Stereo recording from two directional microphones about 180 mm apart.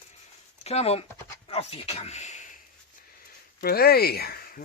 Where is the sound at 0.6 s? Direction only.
35° left (ahead or behind).